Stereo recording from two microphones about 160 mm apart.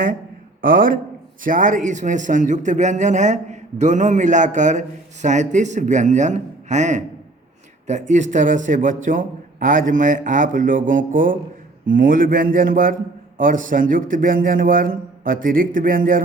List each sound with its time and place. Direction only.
0.6 s a man's voice: 60° right (ahead or behind)